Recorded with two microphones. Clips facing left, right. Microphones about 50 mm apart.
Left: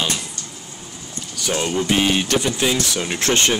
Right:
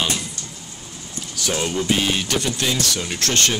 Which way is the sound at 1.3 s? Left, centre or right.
Centre.